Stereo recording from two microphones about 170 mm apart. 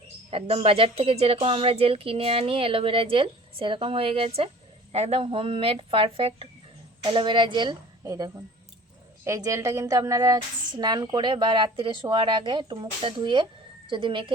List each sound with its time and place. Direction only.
0.3 s a woman's voice: 35° right (ahead or behind)